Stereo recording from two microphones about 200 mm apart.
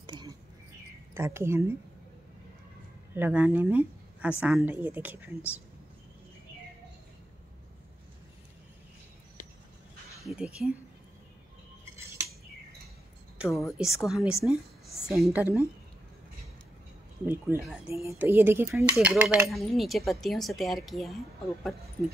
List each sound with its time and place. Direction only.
0.0 s a sound: 20° right (ahead or behind)
1.1 s speech: 10° right (ahead or behind)
3.2 s speech: 10° right (ahead or behind)
10.2 s a woman's voice: 5° right (ahead or behind)
13.4 s a woman's voice: centre (ahead or behind)
17.3 s a woman's voice: 10° right (ahead or behind)